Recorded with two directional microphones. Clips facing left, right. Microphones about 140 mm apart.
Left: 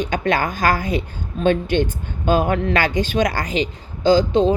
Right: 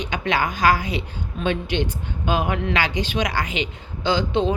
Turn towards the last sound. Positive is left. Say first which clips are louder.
# left 6 dB
turn(degrees=40)  # may be behind; listen again after turning